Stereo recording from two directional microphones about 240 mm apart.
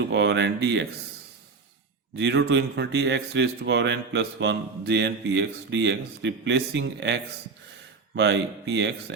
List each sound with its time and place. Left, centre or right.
0.0 s speech: right
2.1 s speech: right